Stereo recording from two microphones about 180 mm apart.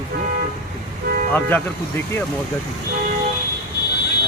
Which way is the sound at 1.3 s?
10° left (ahead or behind).